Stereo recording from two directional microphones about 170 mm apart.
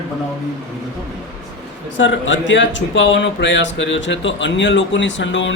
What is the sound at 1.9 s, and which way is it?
Speech, 90° left.